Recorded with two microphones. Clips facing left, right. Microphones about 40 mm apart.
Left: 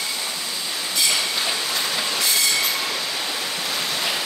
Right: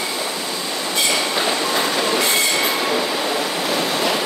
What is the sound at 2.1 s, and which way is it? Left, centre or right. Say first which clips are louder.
Train: right 4 dB; right.